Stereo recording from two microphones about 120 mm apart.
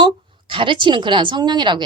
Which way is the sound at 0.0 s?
45° right (ahead or behind).